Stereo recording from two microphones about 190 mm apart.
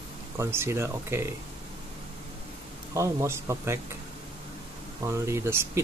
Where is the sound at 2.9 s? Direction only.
15° right (ahead or behind).